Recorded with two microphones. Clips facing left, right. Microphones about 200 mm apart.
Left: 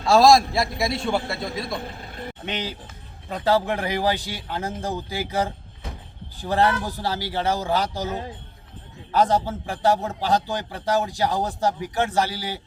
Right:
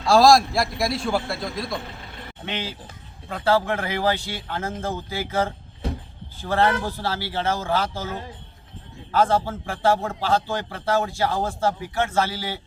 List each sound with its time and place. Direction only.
0.0 s a man's voice: centre (ahead or behind)
2.5 s a man's voice: 15° left (ahead or behind)